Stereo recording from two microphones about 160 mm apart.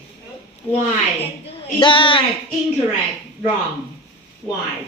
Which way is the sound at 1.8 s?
30° left (ahead or behind).